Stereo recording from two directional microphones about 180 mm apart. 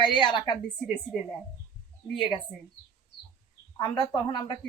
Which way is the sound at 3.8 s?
30° left (ahead or behind).